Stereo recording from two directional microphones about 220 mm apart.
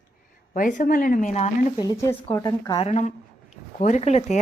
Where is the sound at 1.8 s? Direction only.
15° left (ahead or behind); by 4.4 s 30° left (ahead or behind).